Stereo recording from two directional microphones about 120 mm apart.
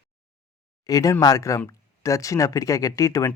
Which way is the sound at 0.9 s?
30° left (ahead or behind).